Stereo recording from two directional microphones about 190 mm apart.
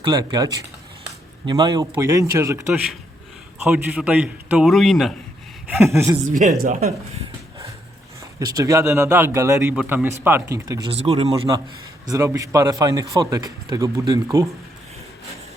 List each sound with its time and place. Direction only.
0.0 s a man's voice: 20° right (ahead or behind); by 5.1 s centre (ahead or behind)
6.3 s speech: 40° right (ahead or behind)
8.4 s speech: 20° right (ahead or behind)
10.9 s speech: 30° right (ahead or behind)
12.0 s a man's voice: 15° right (ahead or behind)